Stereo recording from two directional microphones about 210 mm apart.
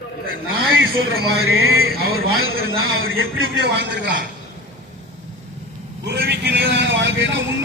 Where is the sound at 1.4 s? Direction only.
75° right (ahead or behind); by 4.2 s 55° right (ahead or behind).